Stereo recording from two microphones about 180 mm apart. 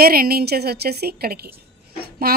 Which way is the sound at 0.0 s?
55° right (ahead or behind).